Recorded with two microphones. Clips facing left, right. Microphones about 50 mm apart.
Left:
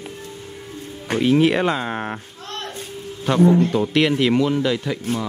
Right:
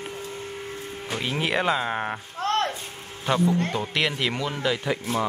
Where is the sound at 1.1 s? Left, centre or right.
Centre.